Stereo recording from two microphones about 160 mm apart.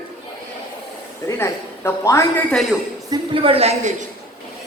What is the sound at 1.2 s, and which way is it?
A man's voice, 15° left (ahead or behind).